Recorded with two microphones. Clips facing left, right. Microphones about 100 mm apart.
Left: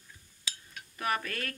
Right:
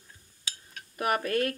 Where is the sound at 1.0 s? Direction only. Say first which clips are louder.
Right 6 dB; 55° right (ahead or behind).